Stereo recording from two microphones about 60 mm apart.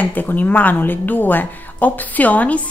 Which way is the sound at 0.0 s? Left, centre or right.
Left.